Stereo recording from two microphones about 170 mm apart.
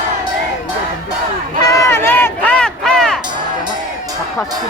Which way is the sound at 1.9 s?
15° left (ahead or behind).